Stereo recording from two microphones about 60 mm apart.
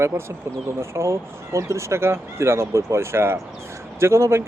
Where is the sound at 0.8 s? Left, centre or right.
Right.